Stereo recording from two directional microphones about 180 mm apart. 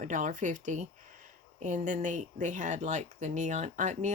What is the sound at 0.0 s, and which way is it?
A woman's voice, 45° right (ahead or behind).